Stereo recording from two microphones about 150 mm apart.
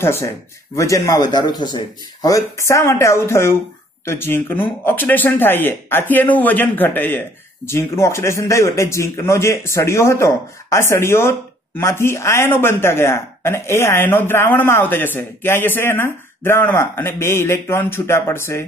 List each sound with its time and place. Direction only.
0.0 s a man's voice: 15° left (ahead or behind)